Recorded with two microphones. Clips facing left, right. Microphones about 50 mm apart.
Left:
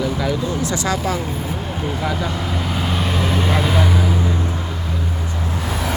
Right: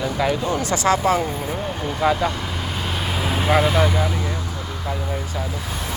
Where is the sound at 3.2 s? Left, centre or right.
Centre.